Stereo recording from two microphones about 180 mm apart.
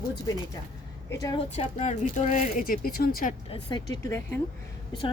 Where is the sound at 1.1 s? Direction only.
20° left (ahead or behind).